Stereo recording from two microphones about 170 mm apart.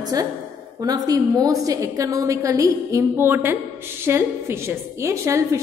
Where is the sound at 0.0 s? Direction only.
20° right (ahead or behind).